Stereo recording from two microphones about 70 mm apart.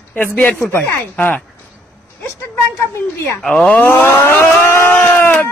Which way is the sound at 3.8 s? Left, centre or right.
Left.